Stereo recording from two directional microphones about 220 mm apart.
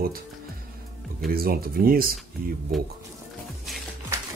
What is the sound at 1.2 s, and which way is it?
Speech, 40° right (ahead or behind).